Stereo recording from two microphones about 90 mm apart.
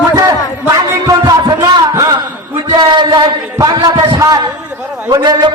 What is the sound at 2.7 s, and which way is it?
Speech, 60° right (ahead or behind).